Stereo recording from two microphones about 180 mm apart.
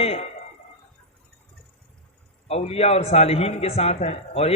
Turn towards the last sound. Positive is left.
turn(degrees=35)  # may be behind; listen again after turning